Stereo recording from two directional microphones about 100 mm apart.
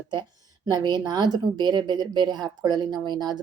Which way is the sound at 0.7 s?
45° right (ahead or behind).